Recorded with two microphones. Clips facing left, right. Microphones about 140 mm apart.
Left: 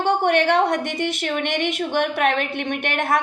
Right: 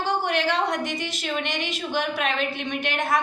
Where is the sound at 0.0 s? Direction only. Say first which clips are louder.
Left 6 dB; 60° left (ahead or behind).